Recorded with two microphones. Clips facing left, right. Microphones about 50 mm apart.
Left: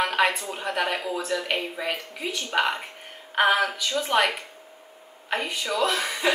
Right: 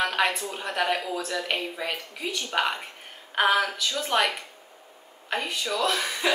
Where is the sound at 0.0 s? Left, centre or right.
Centre.